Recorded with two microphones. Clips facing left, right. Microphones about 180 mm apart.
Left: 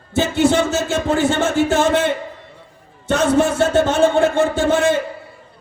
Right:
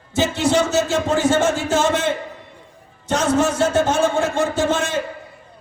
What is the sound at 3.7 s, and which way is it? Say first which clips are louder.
A man's voice: left 3 dB; 65° left (ahead or behind).